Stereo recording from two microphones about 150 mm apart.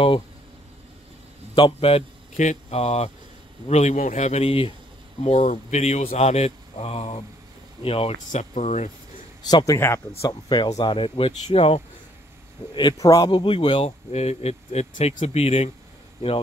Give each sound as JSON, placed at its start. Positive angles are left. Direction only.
{"t": 1.5, "sound": "speech", "side_deg": 40}
{"t": 5.2, "sound": "speech", "side_deg": 50}
{"t": 9.4, "sound": "speech", "side_deg": 25}
{"t": 10.6, "sound": "speech", "side_deg": 30}
{"t": 12.7, "sound": "speech", "side_deg": 25}